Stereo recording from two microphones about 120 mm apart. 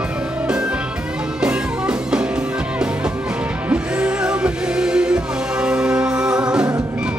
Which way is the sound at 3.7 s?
10° right (ahead or behind).